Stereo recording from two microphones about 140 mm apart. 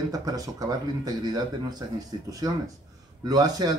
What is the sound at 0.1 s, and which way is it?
Speech, 25° right (ahead or behind).